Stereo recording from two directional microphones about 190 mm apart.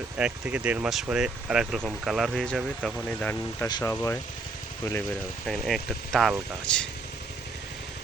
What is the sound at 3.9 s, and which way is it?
Speech, 10° left (ahead or behind).